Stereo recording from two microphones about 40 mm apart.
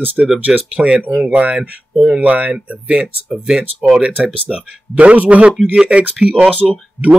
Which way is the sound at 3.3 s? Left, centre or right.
Centre.